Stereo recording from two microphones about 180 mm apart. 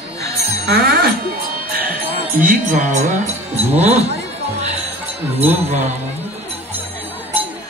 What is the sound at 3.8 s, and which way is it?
Speech, 35° right (ahead or behind).